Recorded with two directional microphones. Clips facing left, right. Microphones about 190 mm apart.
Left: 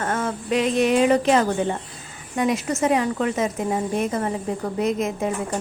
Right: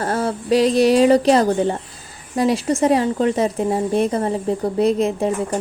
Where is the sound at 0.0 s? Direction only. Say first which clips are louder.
Right 4 dB; 35° right (ahead or behind).